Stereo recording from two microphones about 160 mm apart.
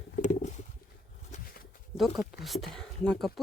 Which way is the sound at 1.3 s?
50° left (ahead or behind).